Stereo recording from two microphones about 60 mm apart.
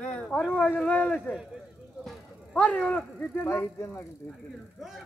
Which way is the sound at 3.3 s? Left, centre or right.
Left.